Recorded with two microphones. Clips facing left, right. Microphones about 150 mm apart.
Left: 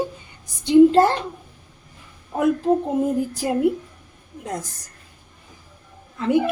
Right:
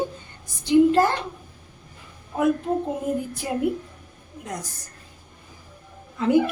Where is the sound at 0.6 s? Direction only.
25° left (ahead or behind).